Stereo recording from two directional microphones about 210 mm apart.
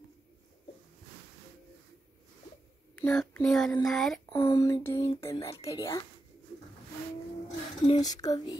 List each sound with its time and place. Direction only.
3.0 s a child's voice: 5° left (ahead or behind)
4.3 s speech: 15° left (ahead or behind)
7.8 s speech: 20° left (ahead or behind)